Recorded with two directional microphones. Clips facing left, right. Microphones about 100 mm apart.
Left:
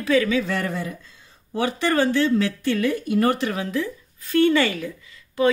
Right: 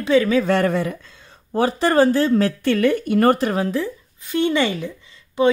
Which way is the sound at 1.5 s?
35° right (ahead or behind).